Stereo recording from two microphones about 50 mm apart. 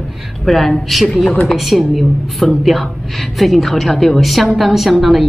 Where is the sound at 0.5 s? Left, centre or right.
Centre.